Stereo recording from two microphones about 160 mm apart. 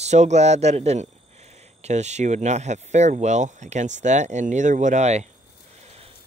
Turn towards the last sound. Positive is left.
turn(degrees=-45)  # may be behind; listen again after turning